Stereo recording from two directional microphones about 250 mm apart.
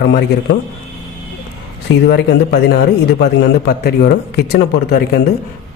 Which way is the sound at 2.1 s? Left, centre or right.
Left.